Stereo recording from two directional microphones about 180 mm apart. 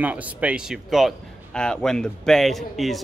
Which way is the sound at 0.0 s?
10° right (ahead or behind).